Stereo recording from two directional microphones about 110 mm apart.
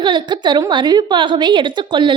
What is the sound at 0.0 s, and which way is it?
A woman's voice, 45° right (ahead or behind).